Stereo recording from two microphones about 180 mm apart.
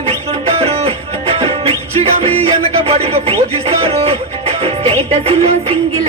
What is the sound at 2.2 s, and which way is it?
Music, 35° right (ahead or behind).